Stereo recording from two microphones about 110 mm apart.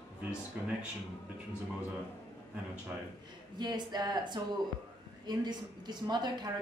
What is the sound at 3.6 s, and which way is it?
A woman's voice, 40° right (ahead or behind).